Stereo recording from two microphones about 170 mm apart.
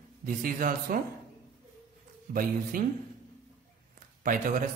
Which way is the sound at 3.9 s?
55° right (ahead or behind).